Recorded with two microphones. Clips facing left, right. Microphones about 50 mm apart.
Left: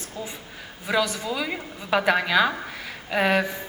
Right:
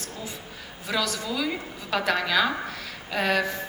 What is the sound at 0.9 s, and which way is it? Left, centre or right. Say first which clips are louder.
A woman's voice: left 4 dB; centre.